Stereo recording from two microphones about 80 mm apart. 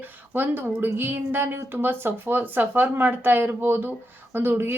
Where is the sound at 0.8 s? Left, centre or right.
Right.